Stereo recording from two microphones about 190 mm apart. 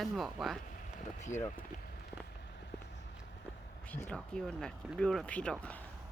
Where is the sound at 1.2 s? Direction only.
40° left (ahead or behind).